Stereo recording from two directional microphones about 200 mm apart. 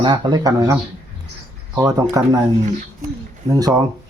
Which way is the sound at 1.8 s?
15° right (ahead or behind).